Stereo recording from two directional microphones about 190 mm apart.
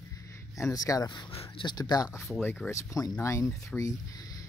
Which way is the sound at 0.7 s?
20° left (ahead or behind).